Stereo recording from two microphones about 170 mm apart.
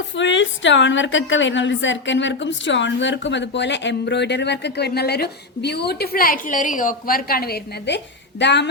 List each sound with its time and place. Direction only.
0.2 s a woman's voice: 90° left